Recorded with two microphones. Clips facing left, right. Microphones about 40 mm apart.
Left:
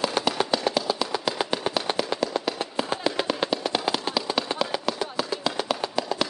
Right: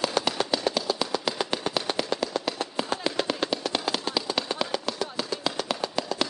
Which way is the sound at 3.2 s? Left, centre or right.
Centre.